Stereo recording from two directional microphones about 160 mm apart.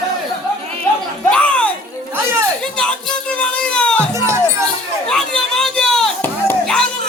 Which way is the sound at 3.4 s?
5° left (ahead or behind).